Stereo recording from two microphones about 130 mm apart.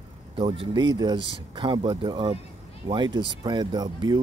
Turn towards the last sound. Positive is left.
turn(degrees=-30)  # may be behind; listen again after turning